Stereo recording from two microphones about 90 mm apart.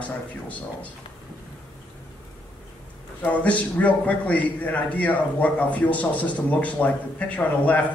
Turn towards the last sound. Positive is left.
turn(degrees=15)  # may be behind; listen again after turning